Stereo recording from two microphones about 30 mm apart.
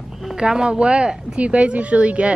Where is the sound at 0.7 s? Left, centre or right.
Right.